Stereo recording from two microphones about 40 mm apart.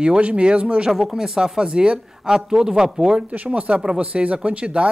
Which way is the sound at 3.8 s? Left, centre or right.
Right.